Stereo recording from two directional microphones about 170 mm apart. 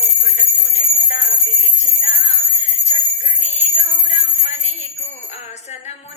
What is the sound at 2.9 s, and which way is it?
Jingle bell, 45° left (ahead or behind).